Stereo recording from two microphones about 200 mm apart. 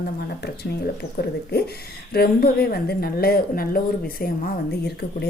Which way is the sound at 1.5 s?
50° left (ahead or behind).